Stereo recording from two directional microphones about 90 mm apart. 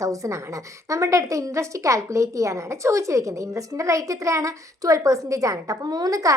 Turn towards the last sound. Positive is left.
turn(degrees=-40)  # may be behind; listen again after turning